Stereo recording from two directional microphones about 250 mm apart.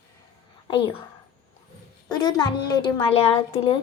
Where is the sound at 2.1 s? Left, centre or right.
Centre.